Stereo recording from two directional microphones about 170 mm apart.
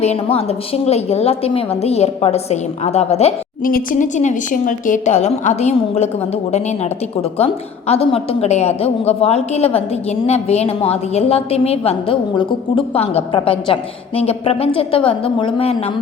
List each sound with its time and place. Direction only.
0.0 s a woman's voice: 35° left (ahead or behind)
3.6 s a woman's voice: 55° left (ahead or behind); by 6.1 s 40° left (ahead or behind)
7.2 s a woman's voice: 35° left (ahead or behind)